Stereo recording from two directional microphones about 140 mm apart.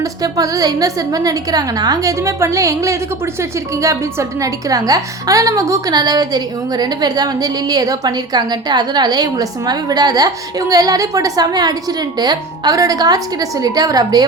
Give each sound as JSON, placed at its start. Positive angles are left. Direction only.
{"t": 0.0, "sound": "a woman's voice", "side_deg": -25}